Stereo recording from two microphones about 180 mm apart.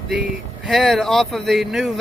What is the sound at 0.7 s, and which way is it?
Music, centre (ahead or behind).